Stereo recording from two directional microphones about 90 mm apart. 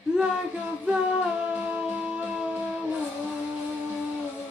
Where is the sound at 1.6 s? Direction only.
15° right (ahead or behind).